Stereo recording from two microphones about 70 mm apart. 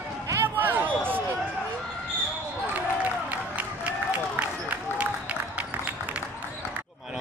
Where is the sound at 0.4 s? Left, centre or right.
Right.